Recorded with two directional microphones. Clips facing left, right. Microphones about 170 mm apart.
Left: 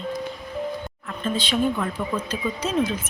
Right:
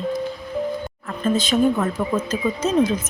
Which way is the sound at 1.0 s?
45° right (ahead or behind).